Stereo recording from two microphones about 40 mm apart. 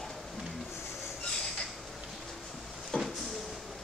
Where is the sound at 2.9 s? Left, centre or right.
Left.